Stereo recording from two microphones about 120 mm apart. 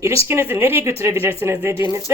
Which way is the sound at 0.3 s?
20° right (ahead or behind).